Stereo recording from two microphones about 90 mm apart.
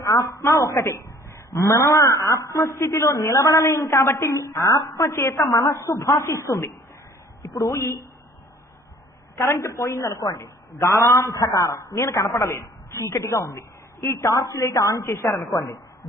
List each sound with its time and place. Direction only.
0.0 s a woman's voice: 40° left (ahead or behind)
9.3 s a woman's voice: 30° left (ahead or behind)